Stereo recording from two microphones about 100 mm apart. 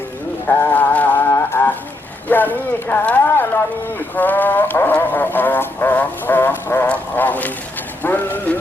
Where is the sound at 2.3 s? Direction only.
20° left (ahead or behind).